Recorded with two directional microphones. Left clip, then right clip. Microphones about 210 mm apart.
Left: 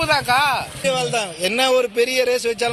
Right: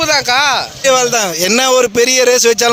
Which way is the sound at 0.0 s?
40° right (ahead or behind).